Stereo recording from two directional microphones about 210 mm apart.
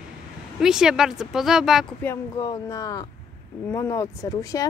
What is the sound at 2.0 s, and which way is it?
Speech, 15° left (ahead or behind).